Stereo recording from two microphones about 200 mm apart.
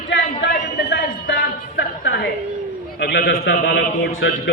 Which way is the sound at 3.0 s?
55° left (ahead or behind).